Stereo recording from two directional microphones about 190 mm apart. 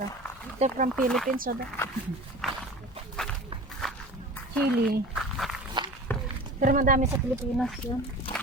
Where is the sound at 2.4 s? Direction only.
Centre (ahead or behind).